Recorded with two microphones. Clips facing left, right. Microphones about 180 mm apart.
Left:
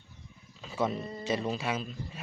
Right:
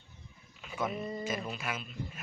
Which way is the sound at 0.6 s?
30° left (ahead or behind).